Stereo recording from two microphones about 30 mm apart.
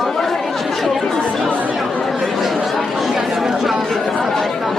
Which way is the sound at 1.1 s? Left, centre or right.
Centre.